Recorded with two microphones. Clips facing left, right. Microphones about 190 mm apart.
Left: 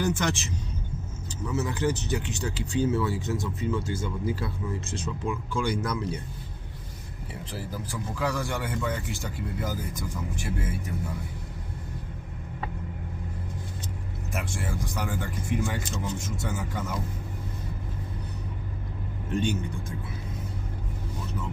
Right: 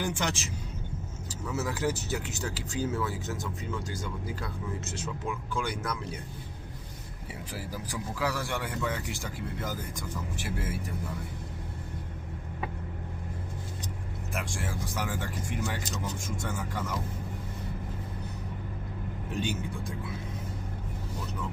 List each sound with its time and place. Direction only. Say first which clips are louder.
0.0 s speech: left 4 dB; 10° right (ahead or behind)
1.5 s speech: left 3 dB; 5° right (ahead or behind)
7.5 s speech: left 2 dB; 10° right (ahead or behind); by 10.1 s 5° left (ahead or behind)
10.4 s speech: left 2 dB; 5° right (ahead or behind)
14.3 s speech: left 3 dB; centre (ahead or behind)
19.3 s speech: left 5 dB; centre (ahead or behind)